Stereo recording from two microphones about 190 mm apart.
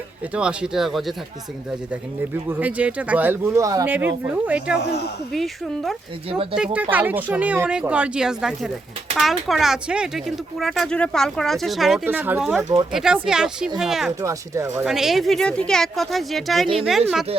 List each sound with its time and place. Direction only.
0.3 s speech: 5° right (ahead or behind)
2.5 s speech: 10° right (ahead or behind)
4.8 s speech: 60° left (ahead or behind)
5.3 s speech: centre (ahead or behind)
6.3 s speech: 25° right (ahead or behind)
6.9 s speech: 10° right (ahead or behind)
14.2 s speech: 15° right (ahead or behind)
14.8 s speech: centre (ahead or behind)